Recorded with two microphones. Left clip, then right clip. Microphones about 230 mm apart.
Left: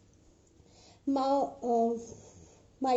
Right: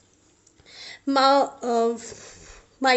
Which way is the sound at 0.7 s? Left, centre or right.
Right.